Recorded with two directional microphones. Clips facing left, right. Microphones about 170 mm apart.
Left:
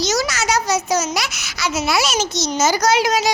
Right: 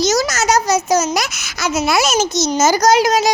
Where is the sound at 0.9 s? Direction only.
45° right (ahead or behind).